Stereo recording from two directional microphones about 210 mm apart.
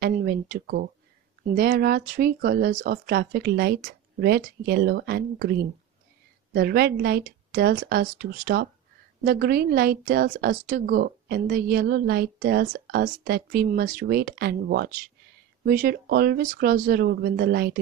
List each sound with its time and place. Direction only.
0.0 s speech: 45° right (ahead or behind)